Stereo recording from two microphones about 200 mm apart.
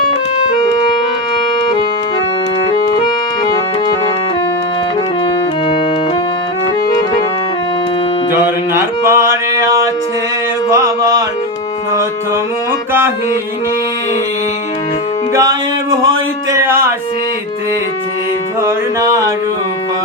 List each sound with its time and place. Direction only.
3.4 s music: 20° left (ahead or behind)
8.4 s music: 10° right (ahead or behind)
16.6 s music: 10° right (ahead or behind)
18.6 s music: 15° right (ahead or behind)